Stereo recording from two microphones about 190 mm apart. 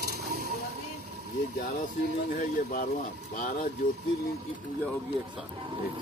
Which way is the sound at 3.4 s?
45° left (ahead or behind).